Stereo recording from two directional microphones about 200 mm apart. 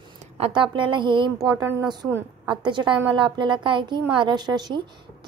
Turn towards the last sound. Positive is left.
turn(degrees=-20)  # may be behind; listen again after turning